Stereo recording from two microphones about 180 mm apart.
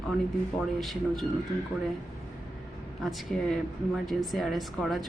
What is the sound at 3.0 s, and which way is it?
Speech, centre (ahead or behind).